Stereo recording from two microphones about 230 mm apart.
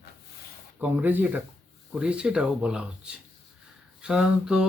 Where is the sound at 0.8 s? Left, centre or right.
Centre.